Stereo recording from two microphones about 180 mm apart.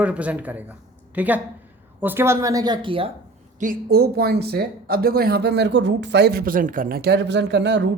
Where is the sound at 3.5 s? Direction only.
55° right (ahead or behind).